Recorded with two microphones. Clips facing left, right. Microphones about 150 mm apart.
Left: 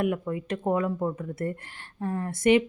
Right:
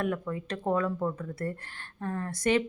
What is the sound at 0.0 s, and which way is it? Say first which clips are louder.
A woman's voice: left 4 dB; 15° left (ahead or behind).